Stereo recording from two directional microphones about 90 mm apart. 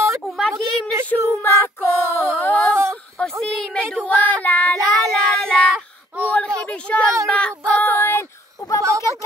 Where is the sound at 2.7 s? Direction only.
30° right (ahead or behind).